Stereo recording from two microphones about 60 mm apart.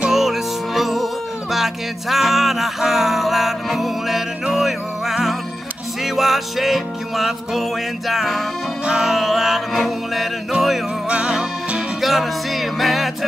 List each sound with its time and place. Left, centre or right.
0.1 s music: centre
11.1 s music: centre
12.0 s music: centre